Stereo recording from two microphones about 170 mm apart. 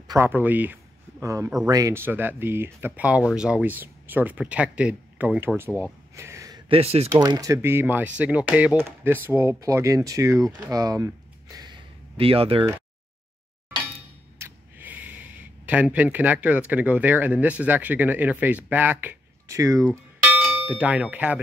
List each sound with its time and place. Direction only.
0.1 s speech: 15° right (ahead or behind)
5.8 s a sound: 15° right (ahead or behind)
6.7 s speech: 35° right (ahead or behind)
7.1 s speech: 20° right (ahead or behind)
14.4 s speech: 10° right (ahead or behind)
19.9 s clang: 10° right (ahead or behind)